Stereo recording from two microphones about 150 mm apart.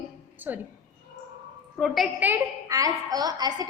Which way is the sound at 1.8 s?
Centre (ahead or behind).